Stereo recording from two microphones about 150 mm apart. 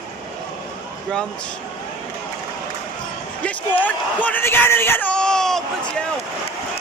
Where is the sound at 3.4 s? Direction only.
10° left (ahead or behind).